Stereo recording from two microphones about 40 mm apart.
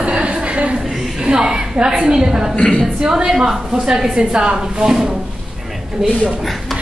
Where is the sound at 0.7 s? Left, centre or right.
Centre.